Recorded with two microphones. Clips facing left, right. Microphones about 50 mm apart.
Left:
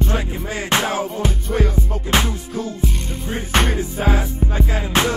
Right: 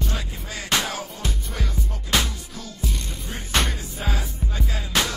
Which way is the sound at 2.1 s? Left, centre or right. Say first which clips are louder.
Left 3 dB; left.